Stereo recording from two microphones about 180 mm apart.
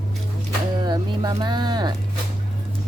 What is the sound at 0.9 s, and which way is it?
Speech, 20° right (ahead or behind).